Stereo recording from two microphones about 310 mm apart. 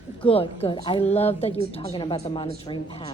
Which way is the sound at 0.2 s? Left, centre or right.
Centre.